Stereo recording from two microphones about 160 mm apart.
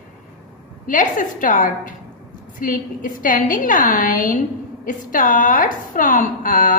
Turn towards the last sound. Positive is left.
turn(degrees=55)  # may be behind; listen again after turning